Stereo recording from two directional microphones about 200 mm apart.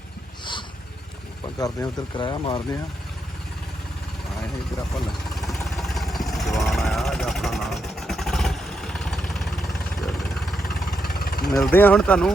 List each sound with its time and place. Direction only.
1.5 s speech: 20° left (ahead or behind)
4.9 s vehicle: centre (ahead or behind)
11.0 s vehicle: 50° left (ahead or behind)
11.6 s speech: 10° left (ahead or behind)